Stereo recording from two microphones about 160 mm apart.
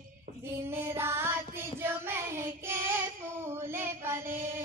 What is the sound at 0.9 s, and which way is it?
Child singing, 15° right (ahead or behind).